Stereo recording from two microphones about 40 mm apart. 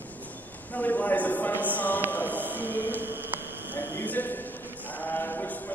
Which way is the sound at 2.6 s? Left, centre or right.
Right.